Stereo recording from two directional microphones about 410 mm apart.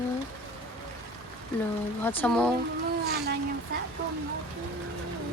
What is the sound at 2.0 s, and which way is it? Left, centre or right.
Speech, centre.